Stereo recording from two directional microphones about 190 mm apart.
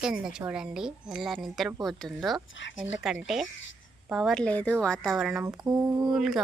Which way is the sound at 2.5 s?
75° left (ahead or behind).